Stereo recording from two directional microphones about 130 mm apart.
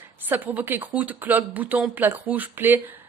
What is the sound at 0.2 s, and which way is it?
A woman's voice, 15° right (ahead or behind).